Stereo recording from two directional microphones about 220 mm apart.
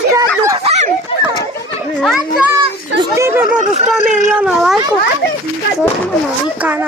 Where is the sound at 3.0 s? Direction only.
10° right (ahead or behind).